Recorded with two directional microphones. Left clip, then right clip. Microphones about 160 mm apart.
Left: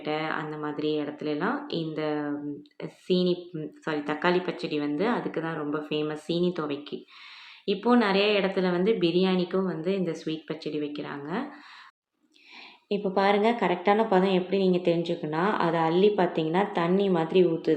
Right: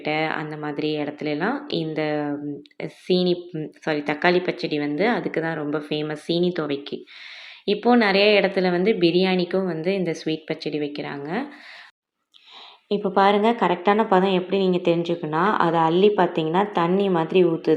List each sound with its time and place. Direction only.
0.0 s a woman's voice: 25° right (ahead or behind)
12.9 s a woman's voice: 20° right (ahead or behind)